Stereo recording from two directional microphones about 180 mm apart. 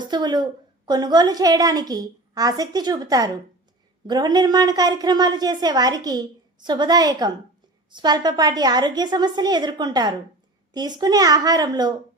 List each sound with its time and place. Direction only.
0.0 s a woman's voice: 25° right (ahead or behind)